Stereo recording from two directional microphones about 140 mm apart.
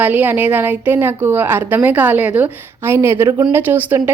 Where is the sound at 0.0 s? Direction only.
15° right (ahead or behind).